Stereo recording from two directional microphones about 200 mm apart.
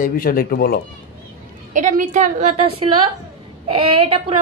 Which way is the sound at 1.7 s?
40° right (ahead or behind).